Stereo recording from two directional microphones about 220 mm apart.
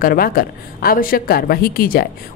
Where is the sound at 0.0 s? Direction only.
40° left (ahead or behind).